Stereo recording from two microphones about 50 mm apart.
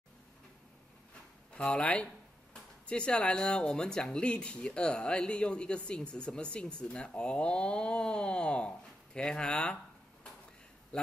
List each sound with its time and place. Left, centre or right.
1.5 s speech: left